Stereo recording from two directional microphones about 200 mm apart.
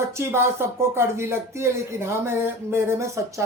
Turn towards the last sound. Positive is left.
turn(degrees=-15)  # may be behind; listen again after turning